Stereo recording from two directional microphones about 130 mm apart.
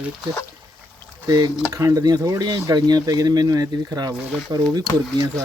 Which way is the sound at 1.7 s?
25° right (ahead or behind).